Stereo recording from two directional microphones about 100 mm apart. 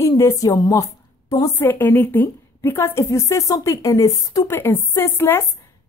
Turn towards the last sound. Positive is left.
turn(degrees=25)  # may be behind; listen again after turning